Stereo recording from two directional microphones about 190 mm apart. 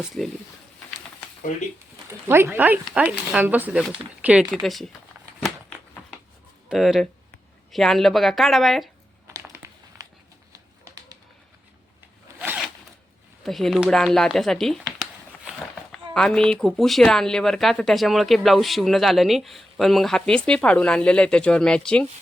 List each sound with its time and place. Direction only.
0.0 s speech: centre (ahead or behind)
2.2 s speech: 10° right (ahead or behind)
6.7 s speech: centre (ahead or behind)
9.2 s a sound: 15° right (ahead or behind)
12.4 s zipper: 5° right (ahead or behind)
13.4 s speech: centre (ahead or behind)